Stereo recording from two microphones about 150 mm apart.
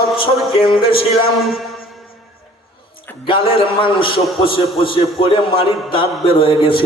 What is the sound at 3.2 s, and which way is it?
A man's voice, 35° left (ahead or behind).